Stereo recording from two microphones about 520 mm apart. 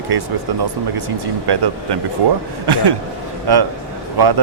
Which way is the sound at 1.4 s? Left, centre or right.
Right.